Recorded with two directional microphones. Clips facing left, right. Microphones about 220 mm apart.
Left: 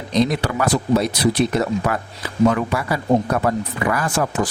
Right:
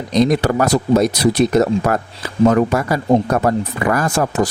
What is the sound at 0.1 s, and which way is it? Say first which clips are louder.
A man's voice: right 4 dB; 45° right (ahead or behind).